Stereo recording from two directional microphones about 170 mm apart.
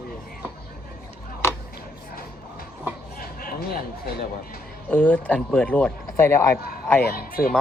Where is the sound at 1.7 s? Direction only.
60° left (ahead or behind).